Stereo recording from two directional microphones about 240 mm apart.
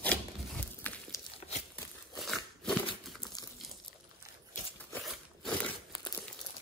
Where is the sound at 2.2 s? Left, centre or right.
Centre.